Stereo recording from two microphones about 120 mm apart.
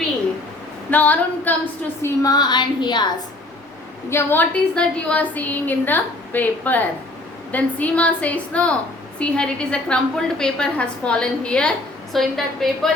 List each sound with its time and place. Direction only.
0.9 s a woman's voice: 15° left (ahead or behind)
2.0 s a woman's voice: 30° left (ahead or behind)
4.1 s a woman's voice: 15° left (ahead or behind)